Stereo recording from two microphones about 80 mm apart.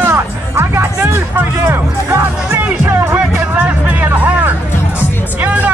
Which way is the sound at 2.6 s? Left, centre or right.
Right.